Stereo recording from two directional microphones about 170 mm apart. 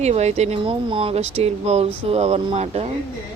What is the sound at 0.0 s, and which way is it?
Speech, 40° right (ahead or behind).